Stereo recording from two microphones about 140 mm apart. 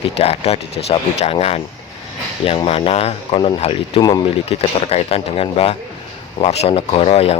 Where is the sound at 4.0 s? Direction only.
25° left (ahead or behind).